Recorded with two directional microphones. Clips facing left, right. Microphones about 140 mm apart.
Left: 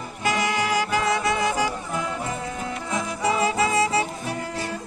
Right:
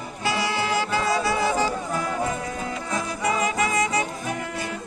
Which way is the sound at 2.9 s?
30° left (ahead or behind).